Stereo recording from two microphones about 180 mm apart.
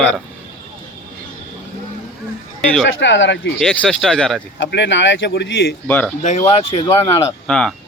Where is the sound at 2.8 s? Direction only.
90° left.